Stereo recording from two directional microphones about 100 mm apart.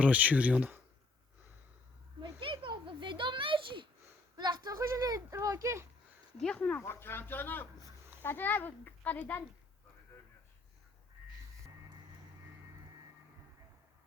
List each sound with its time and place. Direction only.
0.0 s speech: 15° right (ahead or behind)
2.2 s a sound: 60° right (ahead or behind)
4.4 s speech: 45° right (ahead or behind)
6.3 s a child's voice: 10° left (ahead or behind)
6.7 s a child's voice: 25° left (ahead or behind)